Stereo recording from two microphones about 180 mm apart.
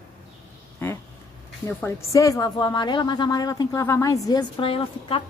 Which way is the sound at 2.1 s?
20° left (ahead or behind).